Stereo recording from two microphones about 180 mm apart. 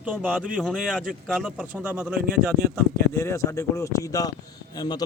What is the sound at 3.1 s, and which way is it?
A man's voice, 15° left (ahead or behind).